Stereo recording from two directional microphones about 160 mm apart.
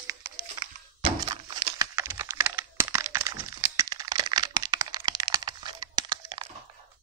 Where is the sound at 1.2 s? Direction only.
30° right (ahead or behind).